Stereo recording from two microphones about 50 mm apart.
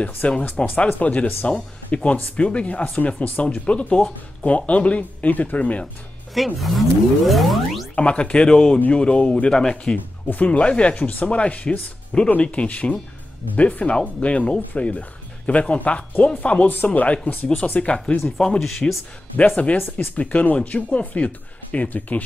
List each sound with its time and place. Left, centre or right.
0.0 s speech: left
6.3 s music: centre
7.9 s speech: left
8.7 s speech: left; by 9.9 s centre
9.9 s speech: left
16.6 s speech: left
18.6 s music: centre
19.3 s speech: left